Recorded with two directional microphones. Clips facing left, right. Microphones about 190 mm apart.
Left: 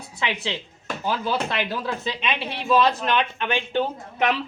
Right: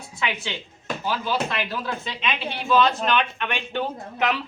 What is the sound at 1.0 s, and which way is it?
Speech, 30° left (ahead or behind).